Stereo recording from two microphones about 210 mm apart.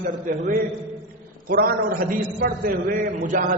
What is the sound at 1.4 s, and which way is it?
A man's voice, 45° right (ahead or behind).